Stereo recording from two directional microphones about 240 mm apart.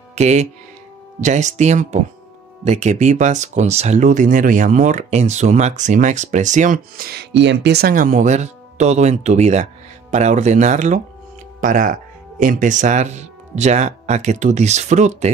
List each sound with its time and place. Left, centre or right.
0.1 s speech: right